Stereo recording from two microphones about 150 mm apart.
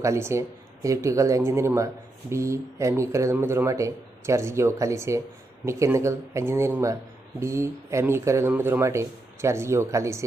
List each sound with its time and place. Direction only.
0.0 s speech: 20° right (ahead or behind)